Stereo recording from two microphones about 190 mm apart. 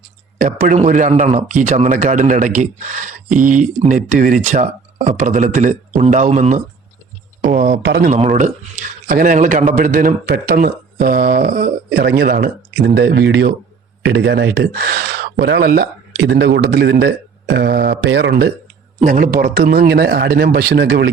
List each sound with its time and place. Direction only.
0.3 s speech: 40° right (ahead or behind)
7.4 s speech: 50° right (ahead or behind)
8.1 s speech: 40° right (ahead or behind); by 18.5 s 60° right (ahead or behind)
19.0 s speech: 45° right (ahead or behind)